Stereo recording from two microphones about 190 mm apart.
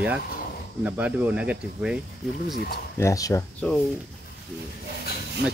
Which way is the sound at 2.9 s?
15° left (ahead or behind).